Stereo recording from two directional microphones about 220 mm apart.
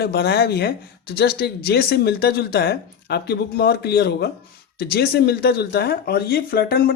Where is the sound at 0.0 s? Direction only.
45° left (ahead or behind).